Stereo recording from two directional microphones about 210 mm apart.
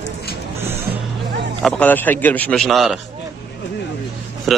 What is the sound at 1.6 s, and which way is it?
A man's voice, 5° left (ahead or behind).